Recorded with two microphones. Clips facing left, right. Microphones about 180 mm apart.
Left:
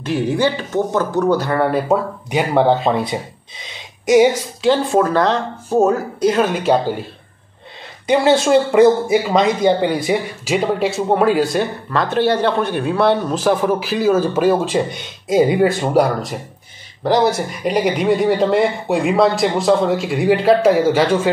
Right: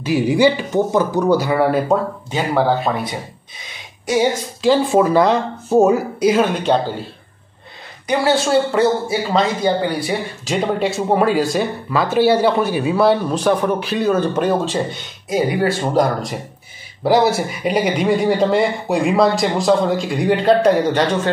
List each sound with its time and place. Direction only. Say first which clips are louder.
0.0 s speech: right 3 dB; 10° right (ahead or behind)
2.3 s speech: left 3 dB; 20° left (ahead or behind)
3.6 s a sound: left 5 dB; 20° left (ahead or behind)
4.6 s speech: right 2 dB; centre (ahead or behind)
8.1 s speech: left 3 dB; 20° left (ahead or behind)
10.4 s speech: right 2 dB; 5° left (ahead or behind); by 15.9 s 20° left (ahead or behind)
15.9 s speech: left 1 dB; 5° left (ahead or behind)
17.0 s speech: right 1 dB; 5° right (ahead or behind)